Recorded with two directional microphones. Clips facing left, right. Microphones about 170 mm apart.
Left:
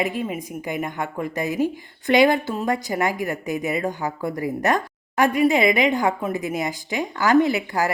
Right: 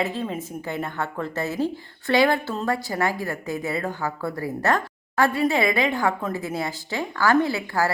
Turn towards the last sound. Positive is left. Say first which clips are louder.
# left 3 dB
turn(degrees=20)  # may be behind; listen again after turning